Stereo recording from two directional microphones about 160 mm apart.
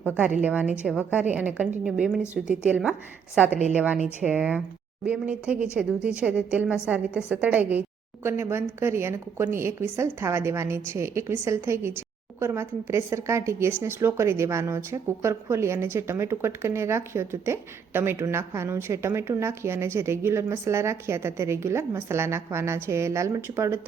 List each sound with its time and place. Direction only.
0.4 s a woman's voice: 10° right (ahead or behind)